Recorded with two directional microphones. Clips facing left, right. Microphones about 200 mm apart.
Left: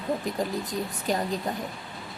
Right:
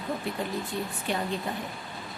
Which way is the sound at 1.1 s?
40° left (ahead or behind).